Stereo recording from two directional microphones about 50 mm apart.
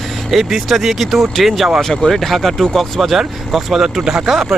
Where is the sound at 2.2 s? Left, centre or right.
Centre.